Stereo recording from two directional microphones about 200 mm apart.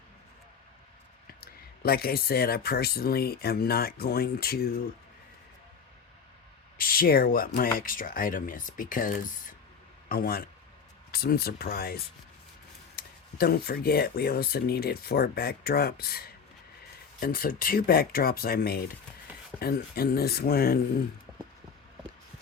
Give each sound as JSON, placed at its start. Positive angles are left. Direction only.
{"t": 1.4, "sound": "speech", "side_deg": 50}
{"t": 6.7, "sound": "speech", "side_deg": 45}
{"t": 13.0, "sound": "speech", "side_deg": 50}